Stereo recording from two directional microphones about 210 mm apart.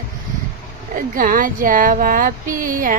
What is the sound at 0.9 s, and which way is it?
Speech, 40° right (ahead or behind).